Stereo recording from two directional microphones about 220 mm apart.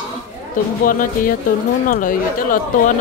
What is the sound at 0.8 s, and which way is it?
Speech, 40° left (ahead or behind).